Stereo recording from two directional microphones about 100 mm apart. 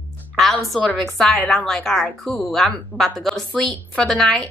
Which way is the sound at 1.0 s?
5° left (ahead or behind).